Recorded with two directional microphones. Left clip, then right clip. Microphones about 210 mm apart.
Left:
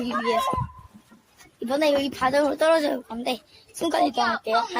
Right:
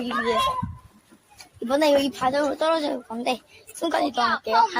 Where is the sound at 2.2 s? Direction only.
20° left (ahead or behind).